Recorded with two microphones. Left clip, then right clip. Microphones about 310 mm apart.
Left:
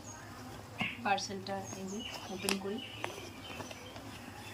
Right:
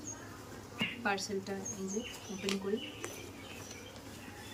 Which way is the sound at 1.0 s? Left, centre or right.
Centre.